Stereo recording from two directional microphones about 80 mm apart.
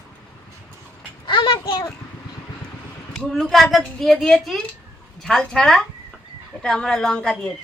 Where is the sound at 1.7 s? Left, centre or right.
Left.